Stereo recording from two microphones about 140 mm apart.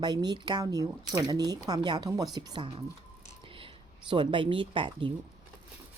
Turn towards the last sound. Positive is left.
turn(degrees=-35)  # may be behind; listen again after turning